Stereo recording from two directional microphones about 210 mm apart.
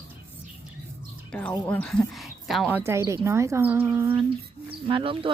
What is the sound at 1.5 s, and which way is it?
Speech, 10° left (ahead or behind).